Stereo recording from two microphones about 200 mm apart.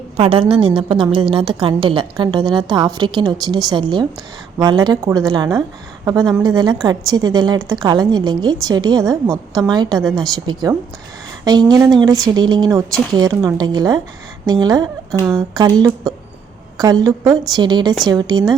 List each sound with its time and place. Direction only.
0.2 s a woman's voice: 25° right (ahead or behind)